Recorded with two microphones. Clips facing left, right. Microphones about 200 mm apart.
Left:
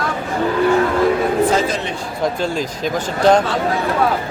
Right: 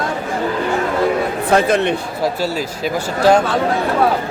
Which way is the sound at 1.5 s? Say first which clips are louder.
Right 5 dB; 60° right (ahead or behind).